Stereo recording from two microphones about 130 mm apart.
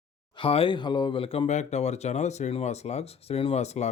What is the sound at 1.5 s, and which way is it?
Speech, 60° left (ahead or behind).